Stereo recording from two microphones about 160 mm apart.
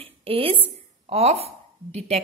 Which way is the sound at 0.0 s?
35° right (ahead or behind).